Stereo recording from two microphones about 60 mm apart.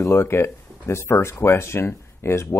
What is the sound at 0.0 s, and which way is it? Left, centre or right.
Speech, left.